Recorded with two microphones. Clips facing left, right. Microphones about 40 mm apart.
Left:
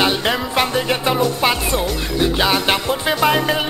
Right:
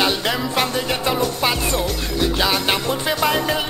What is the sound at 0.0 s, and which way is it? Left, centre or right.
Music, centre.